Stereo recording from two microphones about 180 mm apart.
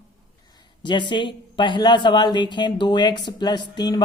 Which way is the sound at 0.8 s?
25° left (ahead or behind).